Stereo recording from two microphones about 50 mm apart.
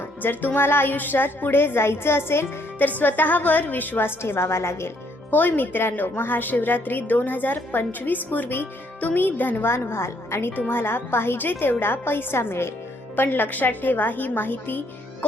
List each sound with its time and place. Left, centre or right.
0.2 s a woman's voice: left
3.0 s a woman's voice: left
4.2 s a woman's voice: left
5.3 s a woman's voice: left
9.6 s a woman's voice: left
10.7 s a woman's voice: left
13.1 s a woman's voice: left